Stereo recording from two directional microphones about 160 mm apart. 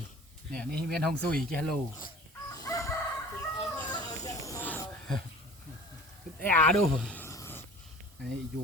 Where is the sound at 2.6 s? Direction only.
20° left (ahead or behind).